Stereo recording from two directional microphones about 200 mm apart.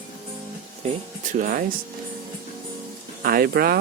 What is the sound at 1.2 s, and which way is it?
Speech, 40° right (ahead or behind).